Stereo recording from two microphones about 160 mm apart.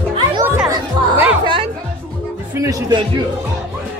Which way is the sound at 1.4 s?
30° right (ahead or behind).